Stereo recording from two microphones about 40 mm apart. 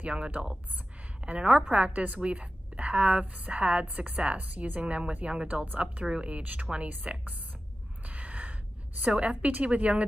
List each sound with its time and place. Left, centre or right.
0.0 s a woman's voice: right
6.4 s speech: right
6.7 s a woman's voice: right
8.0 s a sound: right
9.0 s a woman's voice: right